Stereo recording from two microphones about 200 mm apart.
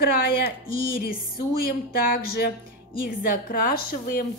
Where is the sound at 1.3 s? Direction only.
50° left (ahead or behind).